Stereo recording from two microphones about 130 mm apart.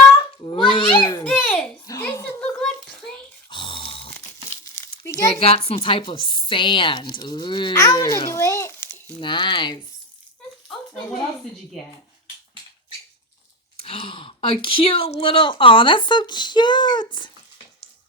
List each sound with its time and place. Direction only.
0.4 s a sound: 40° left (ahead or behind)
1.2 s a sound: 10° left (ahead or behind)
3.5 s grunt: 40° left (ahead or behind)
4.3 s crumpling: 20° left (ahead or behind)
5.3 s a child's voice: 50° left (ahead or behind); by 9.0 s 20° left (ahead or behind)
9.2 s speech: 40° left (ahead or behind)
13.8 s speech: 45° left (ahead or behind)